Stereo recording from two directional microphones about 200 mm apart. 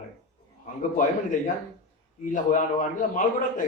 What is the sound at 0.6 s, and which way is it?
A man's voice, 40° left (ahead or behind).